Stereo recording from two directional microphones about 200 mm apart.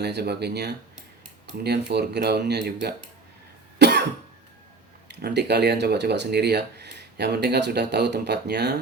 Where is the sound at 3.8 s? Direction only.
55° right (ahead or behind).